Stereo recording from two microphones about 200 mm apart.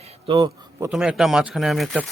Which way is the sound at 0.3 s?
20° right (ahead or behind).